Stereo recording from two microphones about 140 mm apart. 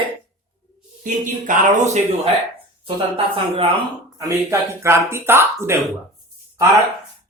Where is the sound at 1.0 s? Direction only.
60° right (ahead or behind).